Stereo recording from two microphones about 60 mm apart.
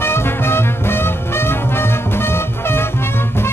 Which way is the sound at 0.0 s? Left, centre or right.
Left.